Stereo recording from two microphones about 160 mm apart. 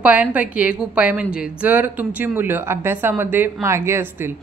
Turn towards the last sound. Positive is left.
turn(degrees=-15)  # may be behind; listen again after turning